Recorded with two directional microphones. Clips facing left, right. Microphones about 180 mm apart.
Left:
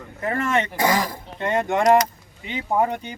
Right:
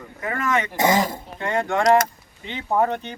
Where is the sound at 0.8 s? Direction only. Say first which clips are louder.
Right 2 dB; 25° right (ahead or behind).